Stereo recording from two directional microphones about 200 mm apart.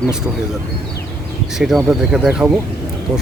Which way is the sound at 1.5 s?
Centre (ahead or behind).